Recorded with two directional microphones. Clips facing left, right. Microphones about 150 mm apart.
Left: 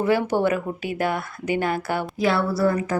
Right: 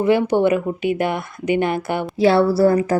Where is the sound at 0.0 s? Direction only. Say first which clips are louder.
Right 4 dB; 20° right (ahead or behind).